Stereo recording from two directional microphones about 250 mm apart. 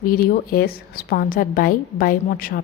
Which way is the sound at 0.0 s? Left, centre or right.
Left.